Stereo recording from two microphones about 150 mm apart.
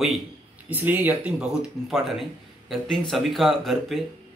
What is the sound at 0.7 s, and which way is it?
A man's voice, 10° right (ahead or behind).